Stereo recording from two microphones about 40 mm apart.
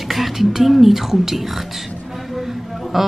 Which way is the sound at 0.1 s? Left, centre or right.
Centre.